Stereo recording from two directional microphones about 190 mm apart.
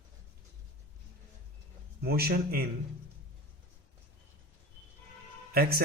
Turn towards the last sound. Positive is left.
turn(degrees=-55)  # may be behind; listen again after turning